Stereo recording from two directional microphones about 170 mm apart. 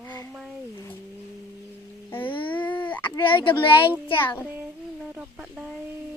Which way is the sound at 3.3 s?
30° left (ahead or behind).